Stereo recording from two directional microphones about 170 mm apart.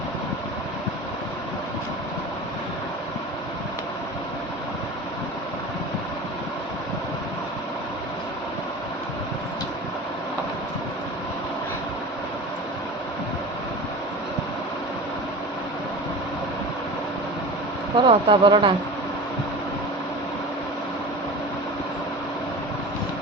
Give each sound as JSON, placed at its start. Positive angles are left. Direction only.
{"t": 17.9, "sound": "speech", "side_deg": -30}